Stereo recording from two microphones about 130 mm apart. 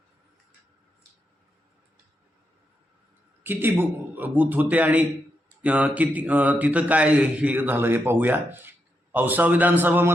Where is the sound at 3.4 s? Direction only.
15° right (ahead or behind).